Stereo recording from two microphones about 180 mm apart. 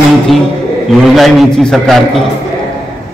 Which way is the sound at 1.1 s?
Centre (ahead or behind).